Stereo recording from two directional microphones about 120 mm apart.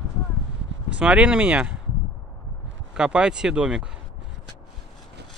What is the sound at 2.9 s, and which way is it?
Speech, 5° right (ahead or behind).